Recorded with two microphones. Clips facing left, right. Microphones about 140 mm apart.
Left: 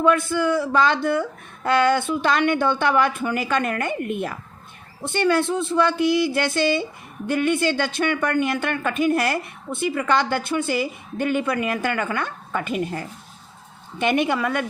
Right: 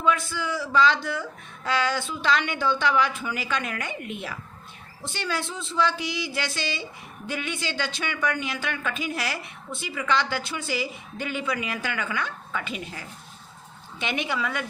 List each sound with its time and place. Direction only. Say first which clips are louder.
0.0 s speech: left 7 dB; 55° left (ahead or behind)